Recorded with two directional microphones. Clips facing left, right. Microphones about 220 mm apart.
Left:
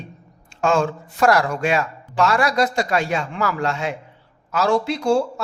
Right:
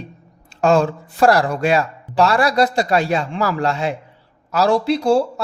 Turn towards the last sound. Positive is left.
turn(degrees=-35)  # may be behind; listen again after turning